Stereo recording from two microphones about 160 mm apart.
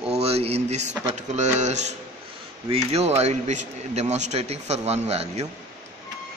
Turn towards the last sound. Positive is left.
turn(degrees=-45)  # may be behind; listen again after turning